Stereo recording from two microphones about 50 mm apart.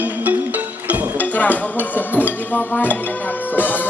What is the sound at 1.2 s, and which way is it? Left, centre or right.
Speech, left.